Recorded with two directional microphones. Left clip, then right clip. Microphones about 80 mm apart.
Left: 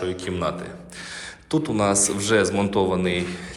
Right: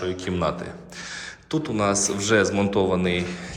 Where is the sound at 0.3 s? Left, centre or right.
Right.